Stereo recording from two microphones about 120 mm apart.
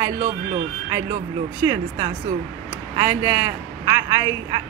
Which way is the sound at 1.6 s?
30° right (ahead or behind).